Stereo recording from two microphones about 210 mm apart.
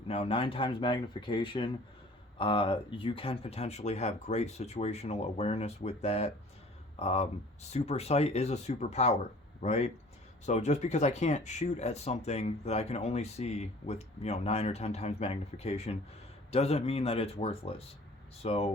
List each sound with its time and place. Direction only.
0.1 s speech: 25° left (ahead or behind)